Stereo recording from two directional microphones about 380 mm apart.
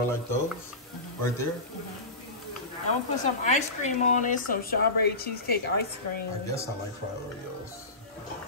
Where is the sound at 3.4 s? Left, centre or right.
Centre.